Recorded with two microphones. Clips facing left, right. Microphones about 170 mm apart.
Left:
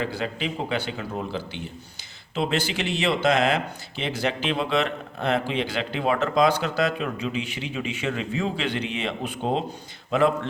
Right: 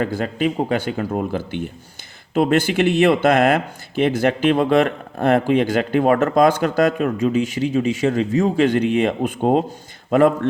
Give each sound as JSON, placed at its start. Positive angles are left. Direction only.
{"t": 0.0, "sound": "speech", "side_deg": -50}